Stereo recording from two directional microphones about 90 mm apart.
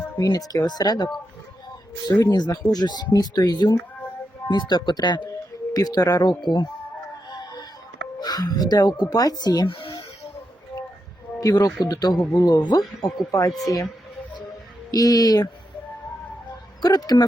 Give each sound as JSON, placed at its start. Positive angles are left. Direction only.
{"t": 0.2, "sound": "speech", "side_deg": 45}
{"t": 5.7, "sound": "speech", "side_deg": 45}
{"t": 7.3, "sound": "music", "side_deg": 55}
{"t": 8.2, "sound": "speech", "side_deg": 45}
{"t": 9.6, "sound": "a sound", "side_deg": 75}
{"t": 11.3, "sound": "speech", "side_deg": 40}
{"t": 14.8, "sound": "speech", "side_deg": 45}
{"t": 16.8, "sound": "speech", "side_deg": 50}